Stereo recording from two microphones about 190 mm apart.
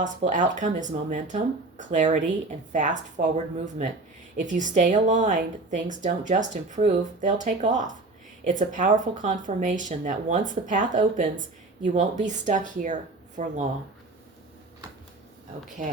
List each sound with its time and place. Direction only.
0.0 s a woman's voice: 40° right (ahead or behind)
15.8 s a woman's voice: 40° right (ahead or behind)